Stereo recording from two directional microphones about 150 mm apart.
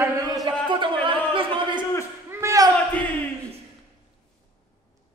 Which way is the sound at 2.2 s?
20° right (ahead or behind).